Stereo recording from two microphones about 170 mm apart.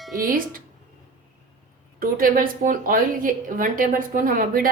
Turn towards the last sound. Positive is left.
turn(degrees=-55)  # may be behind; listen again after turning